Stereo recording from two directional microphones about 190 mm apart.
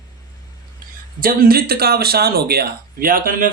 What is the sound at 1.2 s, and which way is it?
Speech, 50° right (ahead or behind).